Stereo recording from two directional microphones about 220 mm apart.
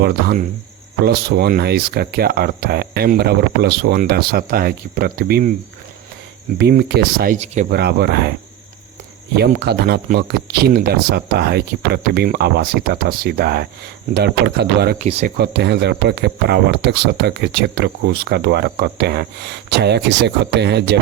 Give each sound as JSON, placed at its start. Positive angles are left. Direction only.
{"t": 0.0, "sound": "speech", "side_deg": -45}
{"t": 6.6, "sound": "speech", "side_deg": -50}
{"t": 7.3, "sound": "speech", "side_deg": -30}
{"t": 7.8, "sound": "speech", "side_deg": -50}
{"t": 9.3, "sound": "speech", "side_deg": -50}
{"t": 15.0, "sound": "speech", "side_deg": -30}
{"t": 15.4, "sound": "speech", "side_deg": -50}